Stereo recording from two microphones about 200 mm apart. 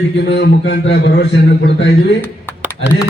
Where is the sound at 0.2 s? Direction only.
55° left (ahead or behind).